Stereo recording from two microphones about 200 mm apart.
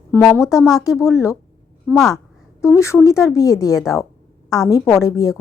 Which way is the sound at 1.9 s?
Centre (ahead or behind).